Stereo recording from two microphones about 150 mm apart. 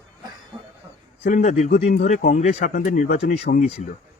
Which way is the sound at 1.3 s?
50° left (ahead or behind).